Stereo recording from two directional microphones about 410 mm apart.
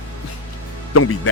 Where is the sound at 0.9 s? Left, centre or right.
Left.